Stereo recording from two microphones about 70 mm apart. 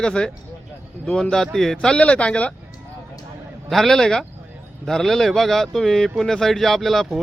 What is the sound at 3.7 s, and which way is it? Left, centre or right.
Speech, centre.